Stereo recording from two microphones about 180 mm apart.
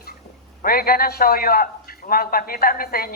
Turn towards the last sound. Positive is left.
turn(degrees=55)  # may be behind; listen again after turning